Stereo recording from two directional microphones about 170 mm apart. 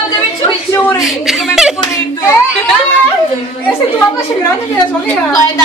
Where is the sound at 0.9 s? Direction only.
Centre (ahead or behind).